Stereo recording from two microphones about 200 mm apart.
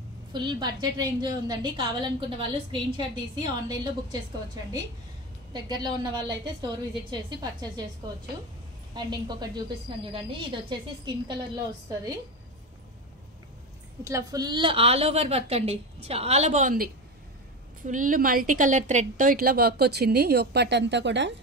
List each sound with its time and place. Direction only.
0.3 s a woman's voice: 20° right (ahead or behind)
5.5 s a woman's voice: 20° right (ahead or behind)
8.9 s a woman's voice: 20° right (ahead or behind)
14.0 s a woman's voice: 15° right (ahead or behind); by 21.4 s 60° right (ahead or behind)